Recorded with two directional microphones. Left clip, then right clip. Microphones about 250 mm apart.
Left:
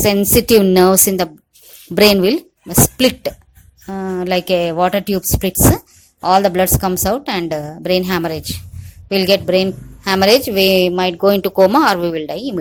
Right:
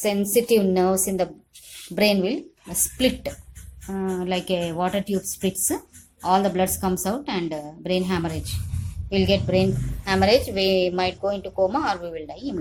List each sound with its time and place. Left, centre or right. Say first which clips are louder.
0.0 s a woman's voice: left 8 dB; left